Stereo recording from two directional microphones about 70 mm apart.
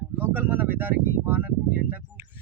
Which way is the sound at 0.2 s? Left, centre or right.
Right.